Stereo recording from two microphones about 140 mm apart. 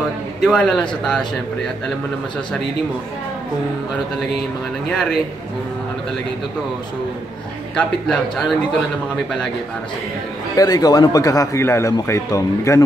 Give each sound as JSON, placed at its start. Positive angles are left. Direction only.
{"t": 0.4, "sound": "a man's voice", "side_deg": 5}
{"t": 7.7, "sound": "a man's voice", "side_deg": 5}
{"t": 10.5, "sound": "speech", "side_deg": 25}